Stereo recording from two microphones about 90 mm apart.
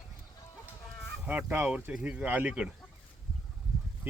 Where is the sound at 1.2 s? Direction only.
15° right (ahead or behind).